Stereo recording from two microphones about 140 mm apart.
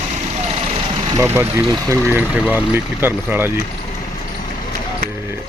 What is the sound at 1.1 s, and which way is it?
Speech, 15° right (ahead or behind).